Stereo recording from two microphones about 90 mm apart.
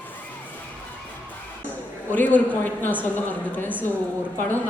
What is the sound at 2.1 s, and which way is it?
A woman's voice, 20° left (ahead or behind).